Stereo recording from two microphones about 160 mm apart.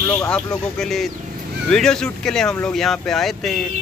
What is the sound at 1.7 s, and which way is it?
Speech, 5° left (ahead or behind).